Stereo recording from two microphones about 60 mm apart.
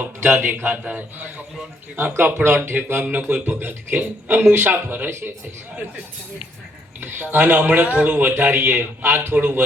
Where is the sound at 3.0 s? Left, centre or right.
Right.